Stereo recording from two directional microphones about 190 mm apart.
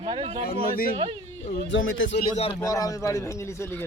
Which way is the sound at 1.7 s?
90° left.